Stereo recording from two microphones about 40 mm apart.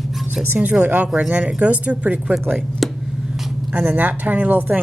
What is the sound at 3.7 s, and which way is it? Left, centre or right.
A woman's voice, right.